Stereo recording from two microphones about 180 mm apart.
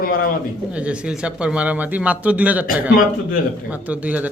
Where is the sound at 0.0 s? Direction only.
55° left (ahead or behind).